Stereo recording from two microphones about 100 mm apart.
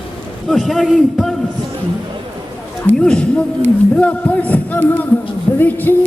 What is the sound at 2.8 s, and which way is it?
Speech, 10° left (ahead or behind).